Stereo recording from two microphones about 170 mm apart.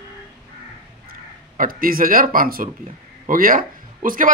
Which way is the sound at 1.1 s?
55° right (ahead or behind).